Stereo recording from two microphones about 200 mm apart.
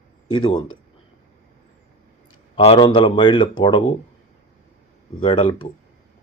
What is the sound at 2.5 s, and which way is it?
Speech, 25° left (ahead or behind).